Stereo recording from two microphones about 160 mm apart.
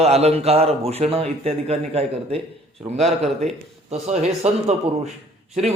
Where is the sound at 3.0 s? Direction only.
Centre (ahead or behind).